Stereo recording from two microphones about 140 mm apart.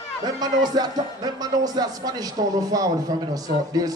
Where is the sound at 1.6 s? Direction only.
30° right (ahead or behind).